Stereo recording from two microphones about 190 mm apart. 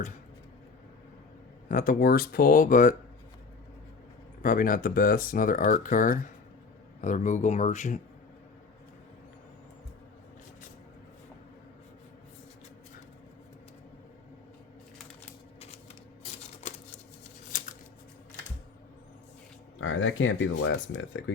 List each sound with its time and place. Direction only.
1.7 s speech: 45° left (ahead or behind)
4.4 s speech: 45° left (ahead or behind)
17.5 s a sound: 45° left (ahead or behind)
19.8 s speech: 90° left